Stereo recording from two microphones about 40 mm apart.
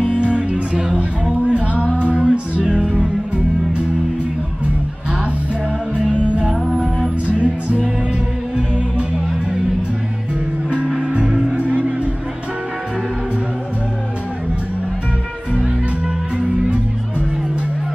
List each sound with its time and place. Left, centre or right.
0.0 s music: right
6.2 s music: right
6.7 s music: centre
7.2 s music: right
11.2 s music: centre
11.5 s music: right
16.3 s music: right